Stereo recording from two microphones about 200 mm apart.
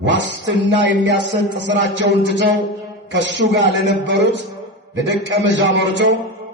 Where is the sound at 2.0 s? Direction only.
60° right (ahead or behind).